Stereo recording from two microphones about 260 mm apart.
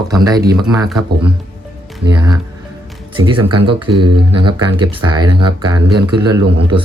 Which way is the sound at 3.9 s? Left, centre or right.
Right.